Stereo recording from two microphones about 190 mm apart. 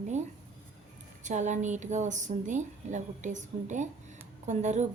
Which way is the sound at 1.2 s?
40° right (ahead or behind).